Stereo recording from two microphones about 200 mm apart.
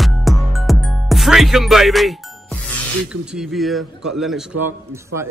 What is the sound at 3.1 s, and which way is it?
A man's voice, centre (ahead or behind).